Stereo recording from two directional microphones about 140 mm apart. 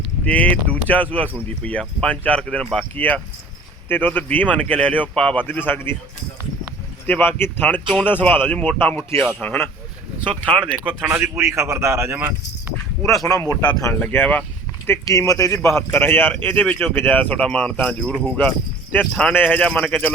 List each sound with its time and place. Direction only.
0.3 s speech: 10° left (ahead or behind)
7.1 s speech: 15° left (ahead or behind)
11.3 s speech: 20° right (ahead or behind)
13.2 s speech: 25° left (ahead or behind)
14.0 s speech: 15° left (ahead or behind)